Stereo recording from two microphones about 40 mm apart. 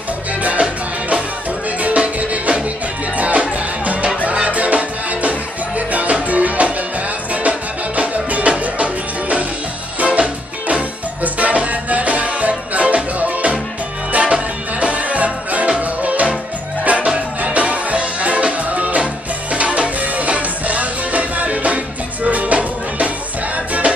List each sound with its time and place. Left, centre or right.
0.4 s music: right
1.8 s music: right